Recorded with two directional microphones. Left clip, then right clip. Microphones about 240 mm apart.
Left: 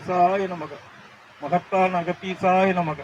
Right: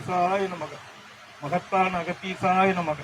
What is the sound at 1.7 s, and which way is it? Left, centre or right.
Speech, left.